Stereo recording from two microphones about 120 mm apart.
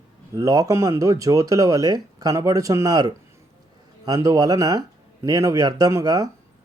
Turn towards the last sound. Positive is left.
turn(degrees=-30)  # may be behind; listen again after turning